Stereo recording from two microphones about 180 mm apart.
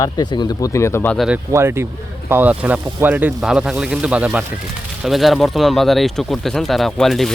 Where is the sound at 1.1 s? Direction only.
Centre (ahead or behind).